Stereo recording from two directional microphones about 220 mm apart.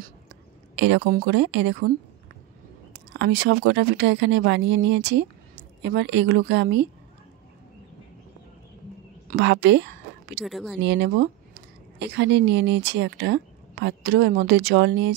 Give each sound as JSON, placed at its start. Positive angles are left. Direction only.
{"t": 0.7, "sound": "a woman's voice", "side_deg": -55}
{"t": 2.9, "sound": "speech", "side_deg": -50}
{"t": 9.4, "sound": "a woman's voice", "side_deg": -50}
{"t": 10.4, "sound": "speech", "side_deg": 0}
{"t": 10.8, "sound": "a woman's voice", "side_deg": -50}